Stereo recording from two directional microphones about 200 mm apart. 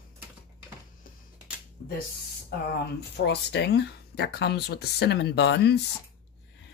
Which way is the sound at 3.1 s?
60° left (ahead or behind).